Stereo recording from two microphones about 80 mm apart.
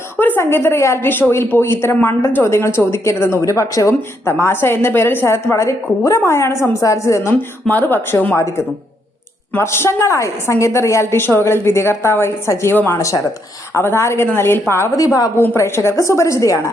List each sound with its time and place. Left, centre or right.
0.2 s a woman's voice: left
4.3 s a woman's voice: left
7.7 s speech: left
8.4 s a woman's voice: left
13.0 s a woman's voice: left
14.9 s a woman's voice: left
15.4 s a woman's voice: left